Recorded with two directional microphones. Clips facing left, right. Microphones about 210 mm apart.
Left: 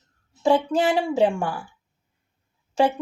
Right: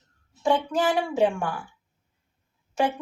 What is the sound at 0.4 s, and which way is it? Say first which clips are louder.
Speech: left 3 dB; 25° left (ahead or behind).